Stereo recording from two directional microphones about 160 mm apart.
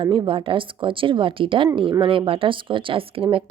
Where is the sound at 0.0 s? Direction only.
30° right (ahead or behind).